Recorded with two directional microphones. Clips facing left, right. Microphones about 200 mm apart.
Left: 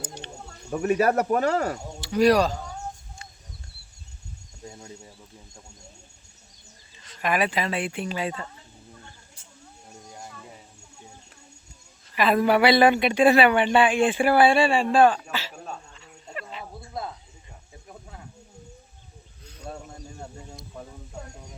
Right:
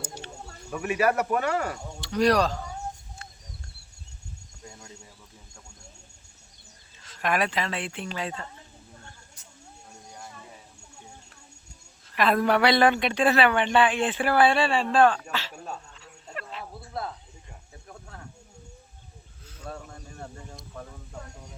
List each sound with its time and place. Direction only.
0.0 s a sound: 5° right (ahead or behind)
0.7 s speech: 35° left (ahead or behind)
2.0 s speech: 5° left (ahead or behind)
7.0 s speech: centre (ahead or behind)
12.1 s speech: 5° left (ahead or behind)
17.8 s snake: 15° left (ahead or behind)
19.6 s a sound: 15° left (ahead or behind)